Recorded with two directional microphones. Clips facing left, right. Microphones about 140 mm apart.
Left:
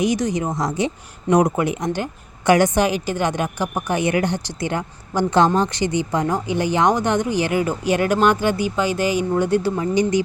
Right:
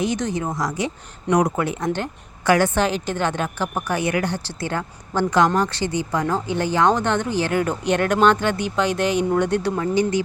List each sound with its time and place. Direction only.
0.0 s speech: 10° left (ahead or behind)
9.8 s speech: 20° left (ahead or behind)